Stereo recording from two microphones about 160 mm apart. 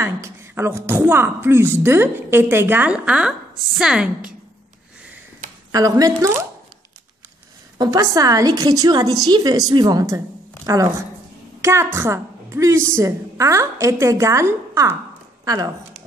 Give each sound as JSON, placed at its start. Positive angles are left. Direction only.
{"t": 0.0, "sound": "a woman's voice", "side_deg": -15}
{"t": 5.7, "sound": "a woman's voice", "side_deg": -20}
{"t": 7.7, "sound": "a woman's voice", "side_deg": -25}